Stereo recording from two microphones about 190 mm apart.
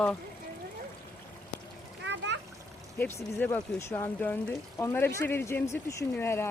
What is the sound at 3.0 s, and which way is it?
Speech, 15° left (ahead or behind).